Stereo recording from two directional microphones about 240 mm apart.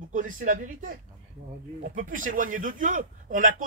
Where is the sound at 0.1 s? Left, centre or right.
Right.